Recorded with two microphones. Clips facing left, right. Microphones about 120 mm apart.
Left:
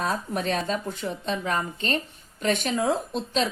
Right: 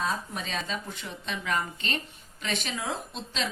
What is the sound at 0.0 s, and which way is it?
A woman's voice, 55° left (ahead or behind).